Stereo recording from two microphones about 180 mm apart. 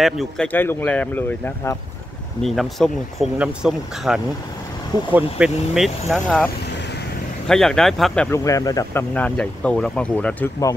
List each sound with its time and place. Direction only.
0.0 s speech: 5° left (ahead or behind)
2.4 s speech: centre (ahead or behind)
8.5 s speech: 20° left (ahead or behind)
9.1 s speech: 5° left (ahead or behind)